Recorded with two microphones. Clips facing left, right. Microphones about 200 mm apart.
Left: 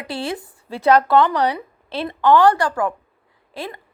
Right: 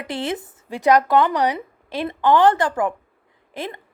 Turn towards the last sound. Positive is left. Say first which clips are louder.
# right 1 dB
turn(degrees=-20)  # may be behind; listen again after turning